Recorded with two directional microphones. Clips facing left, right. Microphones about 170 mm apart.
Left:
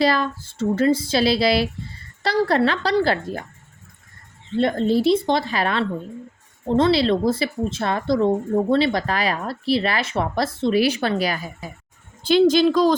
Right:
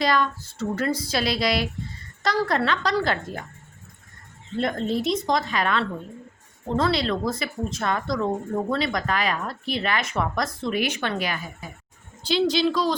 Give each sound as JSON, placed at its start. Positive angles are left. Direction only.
{"t": 0.0, "sound": "speech", "side_deg": 30}
{"t": 4.5, "sound": "speech", "side_deg": 30}
{"t": 12.2, "sound": "speech", "side_deg": 50}